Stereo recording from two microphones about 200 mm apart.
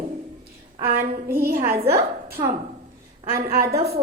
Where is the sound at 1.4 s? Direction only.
50° right (ahead or behind).